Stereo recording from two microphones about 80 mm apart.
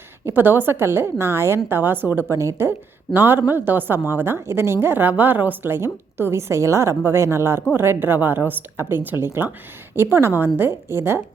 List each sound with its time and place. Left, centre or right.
0.3 s a woman's voice: right
2.3 s a woman's voice: right